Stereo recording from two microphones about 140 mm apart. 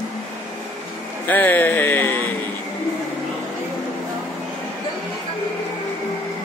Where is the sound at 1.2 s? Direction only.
15° left (ahead or behind).